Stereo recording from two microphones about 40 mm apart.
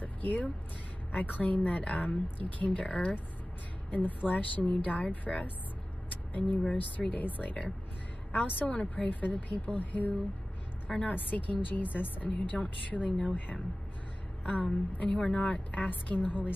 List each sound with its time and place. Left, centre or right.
0.0 s music: left
1.1 s a woman's voice: left
4.3 s a woman's voice: left
6.3 s a woman's voice: left
15.0 s speech: left
15.4 s a woman's voice: left